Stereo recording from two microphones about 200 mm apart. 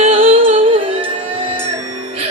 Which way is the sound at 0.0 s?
30° right (ahead or behind).